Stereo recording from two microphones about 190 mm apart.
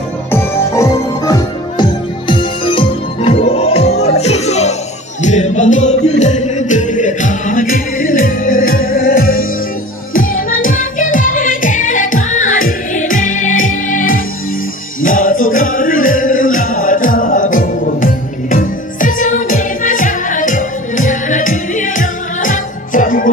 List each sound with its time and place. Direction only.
0.3 s music: 15° left (ahead or behind); by 9.5 s 50° left (ahead or behind)
10.6 s music: 45° left (ahead or behind)